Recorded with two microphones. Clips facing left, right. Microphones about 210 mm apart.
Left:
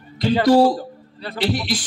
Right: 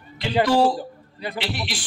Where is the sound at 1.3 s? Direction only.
40° left (ahead or behind).